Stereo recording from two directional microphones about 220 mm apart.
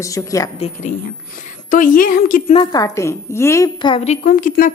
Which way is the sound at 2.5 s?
20° left (ahead or behind).